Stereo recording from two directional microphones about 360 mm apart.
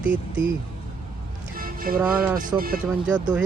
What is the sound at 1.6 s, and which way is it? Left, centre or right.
Music, right.